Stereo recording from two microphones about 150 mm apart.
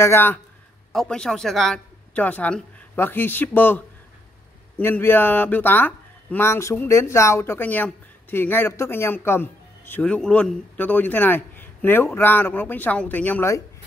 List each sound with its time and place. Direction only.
0.0 s speech: 15° left (ahead or behind)